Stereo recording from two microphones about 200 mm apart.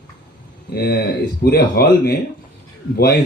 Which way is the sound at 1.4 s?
50° left (ahead or behind).